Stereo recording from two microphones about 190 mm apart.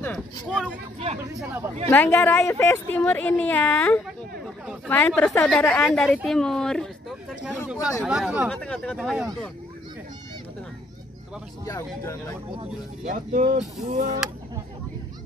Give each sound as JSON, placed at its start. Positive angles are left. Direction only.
{"t": 0.0, "sound": "a sound", "side_deg": 5}
{"t": 0.9, "sound": "speech", "side_deg": -35}
{"t": 1.2, "sound": "speech", "side_deg": -15}
{"t": 1.9, "sound": "a woman's voice", "side_deg": 10}
{"t": 11.6, "sound": "a woman's voice", "side_deg": 15}
{"t": 13.1, "sound": "speech", "side_deg": -40}